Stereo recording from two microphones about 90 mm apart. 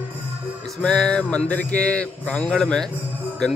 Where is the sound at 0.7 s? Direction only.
5° left (ahead or behind).